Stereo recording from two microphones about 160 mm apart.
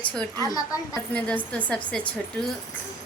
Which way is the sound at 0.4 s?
20° left (ahead or behind).